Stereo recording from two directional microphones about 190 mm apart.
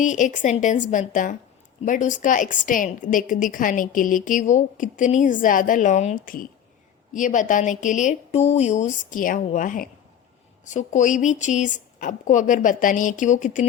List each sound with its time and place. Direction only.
0.0 s a woman's voice: 40° left (ahead or behind)